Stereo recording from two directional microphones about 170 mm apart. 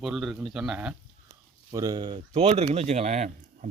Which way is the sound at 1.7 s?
20° right (ahead or behind).